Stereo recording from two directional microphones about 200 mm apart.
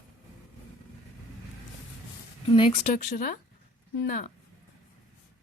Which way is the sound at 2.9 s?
45° left (ahead or behind).